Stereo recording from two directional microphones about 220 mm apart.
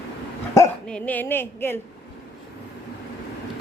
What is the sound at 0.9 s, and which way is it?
Speech, 5° left (ahead or behind).